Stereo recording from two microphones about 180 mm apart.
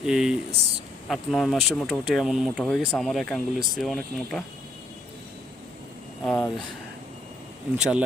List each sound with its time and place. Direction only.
0.0 s speech: 5° right (ahead or behind)
6.2 s speech: 5° left (ahead or behind)
7.8 s speech: 5° right (ahead or behind)